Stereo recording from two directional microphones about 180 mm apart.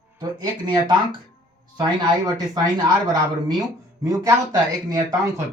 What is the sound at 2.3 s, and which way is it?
Speech, 20° right (ahead or behind).